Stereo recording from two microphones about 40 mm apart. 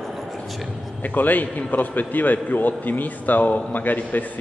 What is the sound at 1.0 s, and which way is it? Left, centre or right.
A man's voice, left.